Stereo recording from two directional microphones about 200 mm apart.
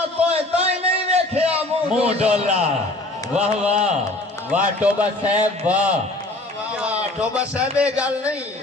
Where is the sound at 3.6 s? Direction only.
35° right (ahead or behind).